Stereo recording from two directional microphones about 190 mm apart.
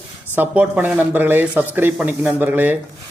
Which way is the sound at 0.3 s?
10° right (ahead or behind).